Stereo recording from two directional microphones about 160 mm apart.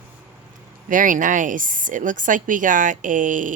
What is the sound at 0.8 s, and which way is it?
Speech, 55° right (ahead or behind).